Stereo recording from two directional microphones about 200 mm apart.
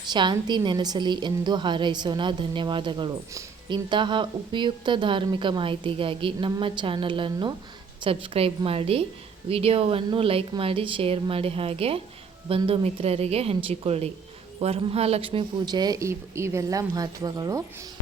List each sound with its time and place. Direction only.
0.1 s a woman's voice: 20° right (ahead or behind)